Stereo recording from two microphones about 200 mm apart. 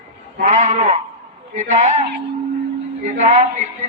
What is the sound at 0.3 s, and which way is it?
Speech, 40° right (ahead or behind).